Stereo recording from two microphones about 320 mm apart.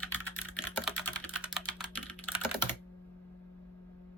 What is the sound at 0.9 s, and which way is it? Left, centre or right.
Typing, centre.